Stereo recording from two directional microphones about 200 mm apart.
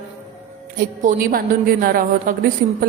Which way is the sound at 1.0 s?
45° right (ahead or behind).